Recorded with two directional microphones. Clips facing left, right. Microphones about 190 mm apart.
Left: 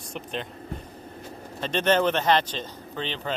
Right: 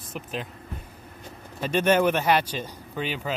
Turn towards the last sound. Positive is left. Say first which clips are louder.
# right 1 dB
turn(degrees=-10)  # may be behind; listen again after turning